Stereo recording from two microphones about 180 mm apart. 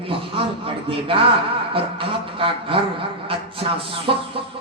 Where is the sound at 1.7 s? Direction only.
30° right (ahead or behind).